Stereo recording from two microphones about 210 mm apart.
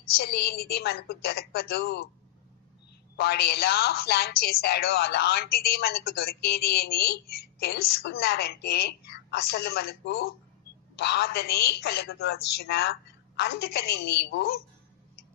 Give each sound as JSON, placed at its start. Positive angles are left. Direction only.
{"t": 0.1, "sound": "speech", "side_deg": 50}
{"t": 3.2, "sound": "speech", "side_deg": 50}